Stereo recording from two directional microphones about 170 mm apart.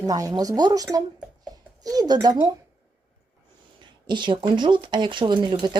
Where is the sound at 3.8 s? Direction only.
25° right (ahead or behind).